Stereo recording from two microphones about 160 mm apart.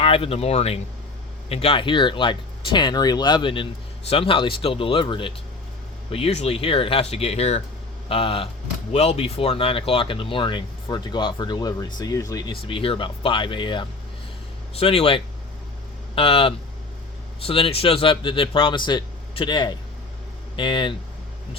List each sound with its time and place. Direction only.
0.0 s speech: 35° left (ahead or behind)